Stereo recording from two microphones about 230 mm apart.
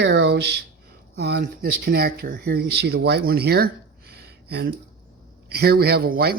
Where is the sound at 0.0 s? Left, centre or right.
Right.